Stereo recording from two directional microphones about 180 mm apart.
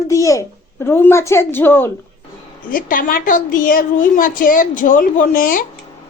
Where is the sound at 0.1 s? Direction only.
15° left (ahead or behind).